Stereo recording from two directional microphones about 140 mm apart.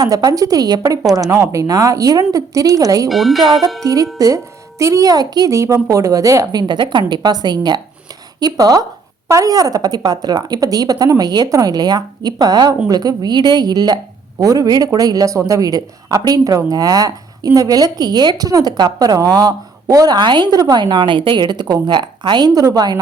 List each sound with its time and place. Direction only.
0.0 s a woman's voice: 25° right (ahead or behind)
3.1 s speech: centre (ahead or behind)
3.8 s a woman's voice: 25° right (ahead or behind)